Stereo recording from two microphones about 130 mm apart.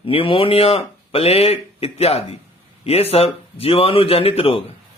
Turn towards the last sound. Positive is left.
turn(degrees=45)  # may be behind; listen again after turning